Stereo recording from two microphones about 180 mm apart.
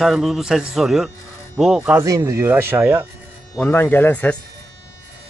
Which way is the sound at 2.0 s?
20° right (ahead or behind).